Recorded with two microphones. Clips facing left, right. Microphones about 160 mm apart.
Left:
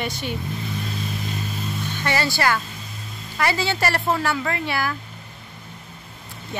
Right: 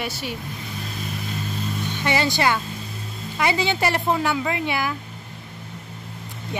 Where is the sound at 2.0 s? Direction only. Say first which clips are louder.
Right 1 dB; 20° right (ahead or behind).